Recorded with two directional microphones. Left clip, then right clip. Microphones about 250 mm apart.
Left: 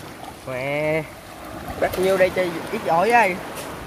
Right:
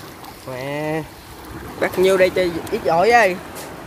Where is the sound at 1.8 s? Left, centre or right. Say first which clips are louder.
Right 3 dB; right.